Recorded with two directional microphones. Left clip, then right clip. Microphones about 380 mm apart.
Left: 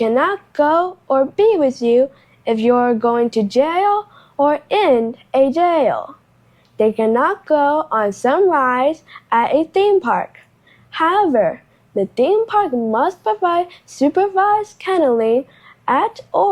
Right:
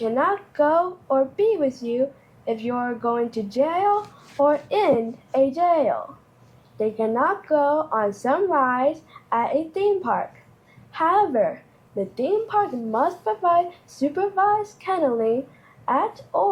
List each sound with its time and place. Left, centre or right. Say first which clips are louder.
0.1 s speech: left 5 dB; left